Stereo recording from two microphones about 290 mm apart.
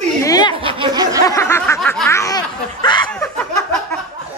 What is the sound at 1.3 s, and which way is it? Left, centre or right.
Snicker, centre.